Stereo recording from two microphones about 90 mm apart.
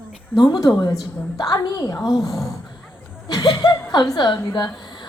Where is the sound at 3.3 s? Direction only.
45° left (ahead or behind).